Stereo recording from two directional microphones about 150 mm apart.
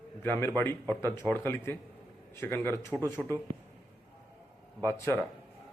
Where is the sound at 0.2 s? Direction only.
15° left (ahead or behind).